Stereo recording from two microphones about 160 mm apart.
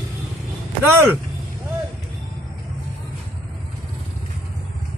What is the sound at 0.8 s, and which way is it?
Speech, 15° right (ahead or behind).